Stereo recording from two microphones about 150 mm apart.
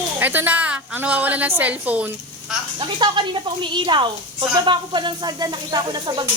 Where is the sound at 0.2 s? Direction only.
10° right (ahead or behind).